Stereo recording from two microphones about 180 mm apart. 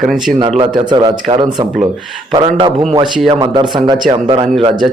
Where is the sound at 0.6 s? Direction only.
25° right (ahead or behind).